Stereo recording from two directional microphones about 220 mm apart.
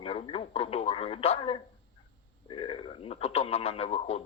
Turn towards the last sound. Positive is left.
turn(degrees=25)  # may be behind; listen again after turning